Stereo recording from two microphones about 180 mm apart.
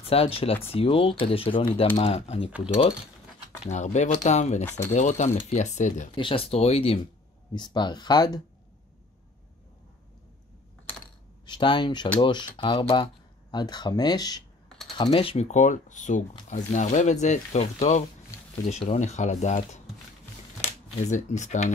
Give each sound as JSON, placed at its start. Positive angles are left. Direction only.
{"t": 0.0, "sound": "speech", "side_deg": 35}
{"t": 3.6, "sound": "speech", "side_deg": 40}
{"t": 4.6, "sound": "speech", "side_deg": 10}
{"t": 4.9, "sound": "speech", "side_deg": 40}
{"t": 6.1, "sound": "speech", "side_deg": 30}
{"t": 11.4, "sound": "speech", "side_deg": 25}